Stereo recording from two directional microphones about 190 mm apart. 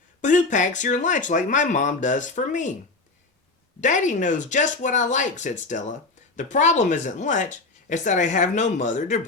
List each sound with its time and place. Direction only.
0.2 s speech: 40° left (ahead or behind)
3.8 s speech: 40° left (ahead or behind)